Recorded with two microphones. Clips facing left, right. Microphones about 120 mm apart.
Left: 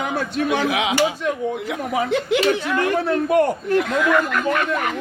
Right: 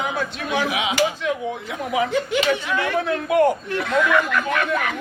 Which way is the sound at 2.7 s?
45° left (ahead or behind).